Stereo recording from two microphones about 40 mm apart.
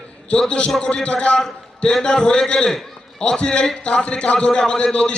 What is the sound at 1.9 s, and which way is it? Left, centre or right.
A man's voice, centre.